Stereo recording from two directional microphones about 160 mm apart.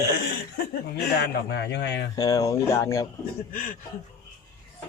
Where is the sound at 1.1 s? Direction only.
90° left.